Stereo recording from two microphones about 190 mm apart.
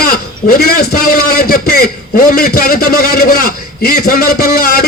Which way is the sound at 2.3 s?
50° left (ahead or behind).